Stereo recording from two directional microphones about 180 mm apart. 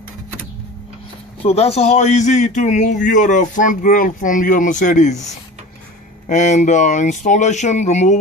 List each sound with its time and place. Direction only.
1.4 s a man's voice: 35° left (ahead or behind)
6.2 s speech: 40° left (ahead or behind)